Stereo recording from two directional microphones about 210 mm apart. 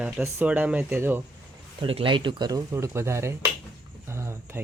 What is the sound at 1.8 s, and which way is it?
Speech, 25° right (ahead or behind).